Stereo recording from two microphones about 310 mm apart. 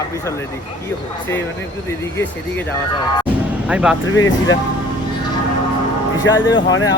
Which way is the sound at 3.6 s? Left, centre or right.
Centre.